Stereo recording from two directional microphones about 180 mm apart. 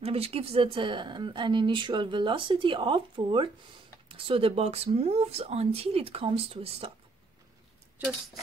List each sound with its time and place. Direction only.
0.0 s speech: 35° right (ahead or behind)
8.0 s speech: 10° right (ahead or behind)